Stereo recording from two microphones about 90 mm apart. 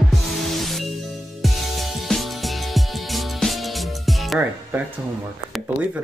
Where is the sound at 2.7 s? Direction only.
Centre (ahead or behind).